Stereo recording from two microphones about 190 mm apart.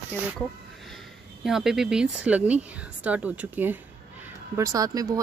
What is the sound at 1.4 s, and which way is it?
Speech, centre (ahead or behind).